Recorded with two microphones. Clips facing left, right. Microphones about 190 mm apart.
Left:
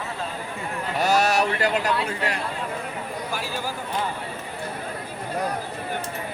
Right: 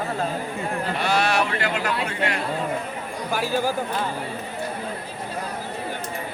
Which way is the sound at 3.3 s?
45° right (ahead or behind).